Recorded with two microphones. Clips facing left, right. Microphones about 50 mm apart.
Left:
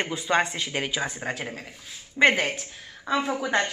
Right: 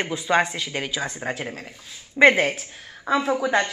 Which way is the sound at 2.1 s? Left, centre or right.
Centre.